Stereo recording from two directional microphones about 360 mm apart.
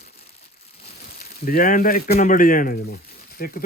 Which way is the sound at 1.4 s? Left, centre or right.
Left.